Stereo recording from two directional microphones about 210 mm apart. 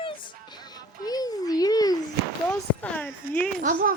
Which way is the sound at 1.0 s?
20° left (ahead or behind).